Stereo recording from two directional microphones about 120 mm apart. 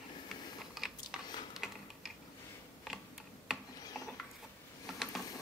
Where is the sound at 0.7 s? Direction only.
5° right (ahead or behind).